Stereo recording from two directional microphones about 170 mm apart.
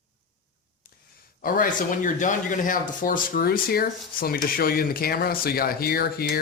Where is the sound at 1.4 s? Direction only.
55° left (ahead or behind).